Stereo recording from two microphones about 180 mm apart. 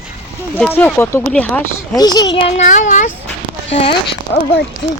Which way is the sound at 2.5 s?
40° left (ahead or behind).